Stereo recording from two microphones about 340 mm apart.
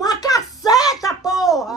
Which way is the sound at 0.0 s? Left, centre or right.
Centre.